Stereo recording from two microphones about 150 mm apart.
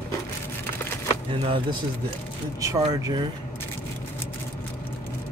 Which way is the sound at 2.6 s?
20° right (ahead or behind).